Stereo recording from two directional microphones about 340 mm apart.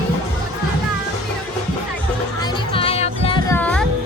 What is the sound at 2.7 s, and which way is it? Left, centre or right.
Music, centre.